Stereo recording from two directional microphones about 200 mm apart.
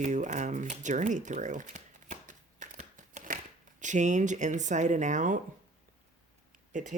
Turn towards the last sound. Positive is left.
turn(degrees=-40)  # may be behind; listen again after turning